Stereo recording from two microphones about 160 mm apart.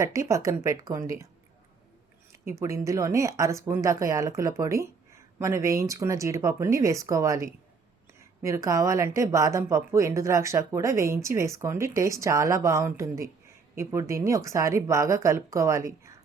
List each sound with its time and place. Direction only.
0.0 s speech: 20° right (ahead or behind)
2.5 s speech: 20° right (ahead or behind)